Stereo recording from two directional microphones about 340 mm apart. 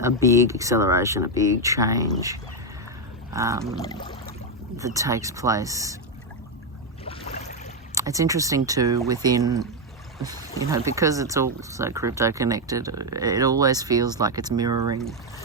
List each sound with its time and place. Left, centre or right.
0.0 s speech: centre
3.3 s speech: centre
3.8 s pour: centre
4.8 s speech: centre
7.0 s boat: centre
7.9 s speech: centre
10.7 s speech: centre